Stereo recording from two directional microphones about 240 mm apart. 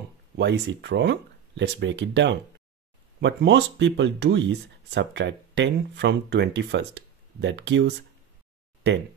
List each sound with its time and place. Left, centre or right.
0.4 s speech: right